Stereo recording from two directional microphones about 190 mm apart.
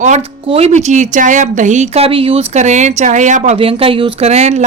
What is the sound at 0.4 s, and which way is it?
Speech, 30° right (ahead or behind).